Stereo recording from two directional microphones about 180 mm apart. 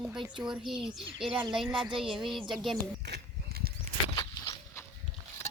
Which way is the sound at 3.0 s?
60° right (ahead or behind).